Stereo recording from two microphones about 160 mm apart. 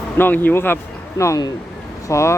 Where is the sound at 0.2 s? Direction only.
10° left (ahead or behind).